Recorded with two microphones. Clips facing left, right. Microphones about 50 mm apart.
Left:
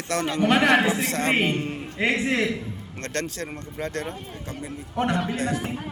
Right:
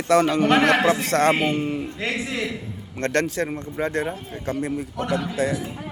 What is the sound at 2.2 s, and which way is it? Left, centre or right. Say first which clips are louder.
Speech: left 4 dB; left.